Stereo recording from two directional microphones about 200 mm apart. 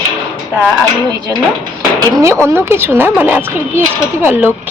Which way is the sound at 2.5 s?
10° right (ahead or behind).